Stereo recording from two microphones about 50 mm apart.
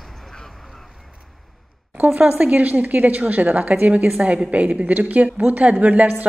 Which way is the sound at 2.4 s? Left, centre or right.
Right.